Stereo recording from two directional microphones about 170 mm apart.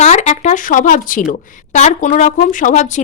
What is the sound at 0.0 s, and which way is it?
Speech, 40° left (ahead or behind).